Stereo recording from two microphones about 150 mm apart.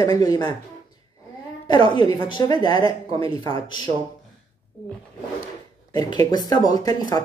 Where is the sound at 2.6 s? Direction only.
35° right (ahead or behind).